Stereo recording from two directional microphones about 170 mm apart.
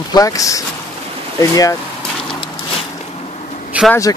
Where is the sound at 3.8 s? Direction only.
10° right (ahead or behind).